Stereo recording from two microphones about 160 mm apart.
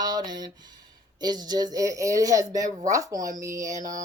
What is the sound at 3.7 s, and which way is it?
Music, 55° right (ahead or behind).